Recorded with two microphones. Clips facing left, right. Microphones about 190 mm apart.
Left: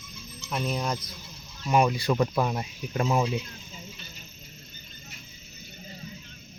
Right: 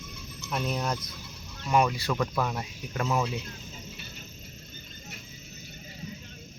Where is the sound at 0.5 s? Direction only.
Centre (ahead or behind).